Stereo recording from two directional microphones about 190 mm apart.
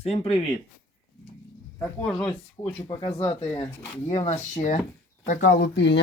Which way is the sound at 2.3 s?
25° left (ahead or behind).